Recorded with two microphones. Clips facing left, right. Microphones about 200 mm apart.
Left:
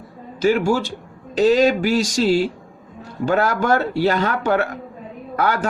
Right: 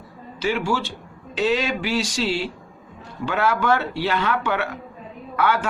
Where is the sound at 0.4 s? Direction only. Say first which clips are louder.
Left 6 dB; 45° left (ahead or behind).